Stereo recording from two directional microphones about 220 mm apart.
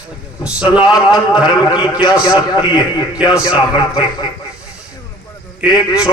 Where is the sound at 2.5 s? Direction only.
20° left (ahead or behind).